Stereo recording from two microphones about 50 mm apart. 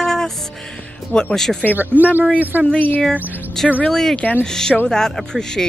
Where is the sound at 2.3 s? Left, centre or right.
Right.